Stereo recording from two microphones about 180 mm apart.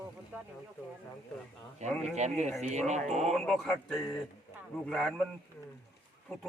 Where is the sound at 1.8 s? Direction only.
40° right (ahead or behind).